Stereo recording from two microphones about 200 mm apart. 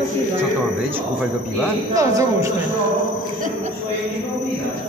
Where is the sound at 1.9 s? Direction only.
15° right (ahead or behind).